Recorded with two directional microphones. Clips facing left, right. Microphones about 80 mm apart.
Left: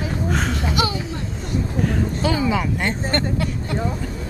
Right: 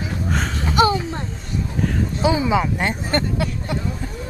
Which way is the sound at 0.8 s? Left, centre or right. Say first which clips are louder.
Right 8 dB; right.